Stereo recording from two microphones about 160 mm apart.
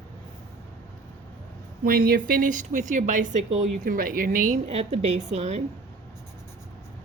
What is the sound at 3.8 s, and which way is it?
Speech, 60° right (ahead or behind).